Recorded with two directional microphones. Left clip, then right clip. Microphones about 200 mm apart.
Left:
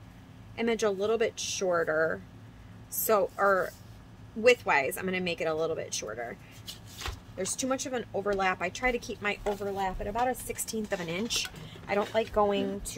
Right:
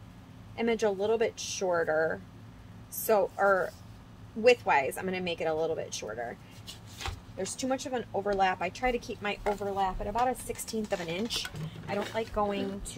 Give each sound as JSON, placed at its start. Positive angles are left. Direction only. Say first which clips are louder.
{"t": 0.6, "sound": "speech", "louder": "even", "side_deg": 10}
{"t": 7.3, "sound": "speech", "louder": "left 1 dB", "side_deg": 15}
{"t": 11.9, "sound": "speech", "louder": "left 5 dB", "side_deg": 40}